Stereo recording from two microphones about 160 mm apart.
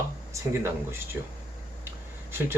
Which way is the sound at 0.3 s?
15° right (ahead or behind).